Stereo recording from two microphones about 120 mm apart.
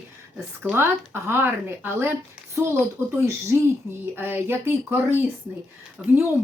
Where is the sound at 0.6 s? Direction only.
15° right (ahead or behind).